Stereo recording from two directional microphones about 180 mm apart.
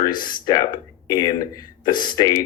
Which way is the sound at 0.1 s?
50° left (ahead or behind).